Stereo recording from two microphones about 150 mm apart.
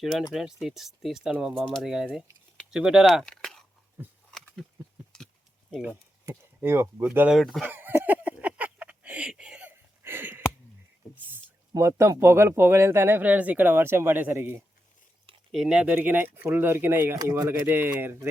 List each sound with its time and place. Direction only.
0.0 s speech: centre (ahead or behind)
4.3 s a sound: 5° left (ahead or behind)
5.7 s speech: 10° right (ahead or behind)
7.3 s speech: centre (ahead or behind)
7.6 s a sound: 15° right (ahead or behind)
11.7 s speech: 20° right (ahead or behind)
15.5 s speech: 5° right (ahead or behind)